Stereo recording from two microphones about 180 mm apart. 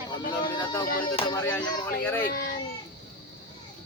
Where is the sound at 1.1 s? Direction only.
30° left (ahead or behind).